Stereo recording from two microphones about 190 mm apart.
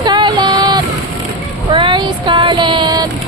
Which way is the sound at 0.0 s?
25° right (ahead or behind).